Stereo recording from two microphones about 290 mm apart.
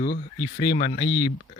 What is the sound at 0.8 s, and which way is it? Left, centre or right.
Speech, left.